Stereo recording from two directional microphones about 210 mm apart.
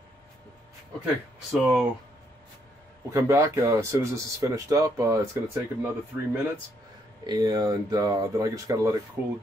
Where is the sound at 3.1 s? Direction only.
15° right (ahead or behind).